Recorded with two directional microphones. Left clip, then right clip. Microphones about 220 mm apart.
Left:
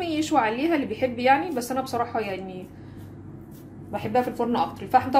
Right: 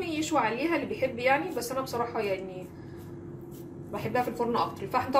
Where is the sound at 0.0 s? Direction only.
45° left (ahead or behind).